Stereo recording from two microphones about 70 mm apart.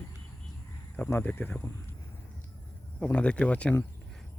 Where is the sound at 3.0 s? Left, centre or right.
Centre.